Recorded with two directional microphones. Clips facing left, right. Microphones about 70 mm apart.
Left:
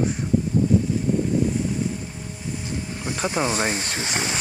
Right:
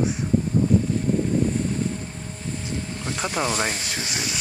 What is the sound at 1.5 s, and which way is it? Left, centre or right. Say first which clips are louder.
Boat: even; centre.